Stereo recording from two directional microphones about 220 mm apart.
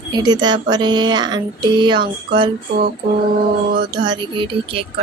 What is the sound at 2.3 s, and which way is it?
Music, 40° right (ahead or behind).